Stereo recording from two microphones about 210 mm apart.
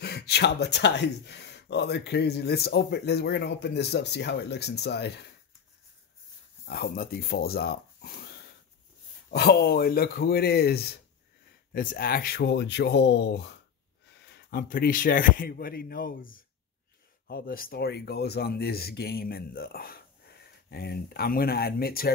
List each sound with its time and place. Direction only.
0.0 s speech: 50° left (ahead or behind)
6.6 s speech: 45° left (ahead or behind)
9.3 s speech: 50° left (ahead or behind)